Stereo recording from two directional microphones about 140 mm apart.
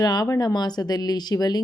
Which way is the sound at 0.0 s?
30° left (ahead or behind).